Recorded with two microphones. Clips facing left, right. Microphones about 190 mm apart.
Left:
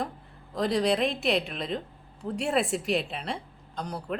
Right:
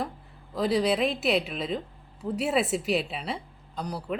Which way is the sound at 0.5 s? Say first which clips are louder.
Right 1 dB; centre (ahead or behind).